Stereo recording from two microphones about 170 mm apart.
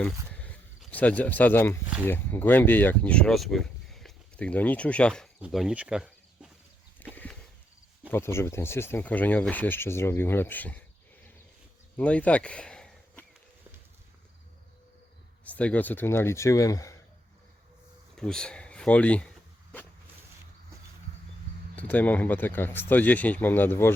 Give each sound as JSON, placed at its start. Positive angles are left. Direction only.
{"t": 0.0, "sound": "speech", "side_deg": 10}
{"t": 7.0, "sound": "a sound", "side_deg": 10}
{"t": 8.1, "sound": "speech", "side_deg": 15}
{"t": 11.9, "sound": "a sound", "side_deg": 10}
{"t": 15.4, "sound": "speech", "side_deg": 10}
{"t": 18.2, "sound": "speech", "side_deg": 5}
{"t": 21.8, "sound": "speech", "side_deg": 10}